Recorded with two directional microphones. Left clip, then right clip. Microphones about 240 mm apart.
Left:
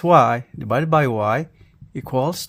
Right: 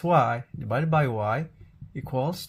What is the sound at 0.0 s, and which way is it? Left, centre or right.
Speech, left.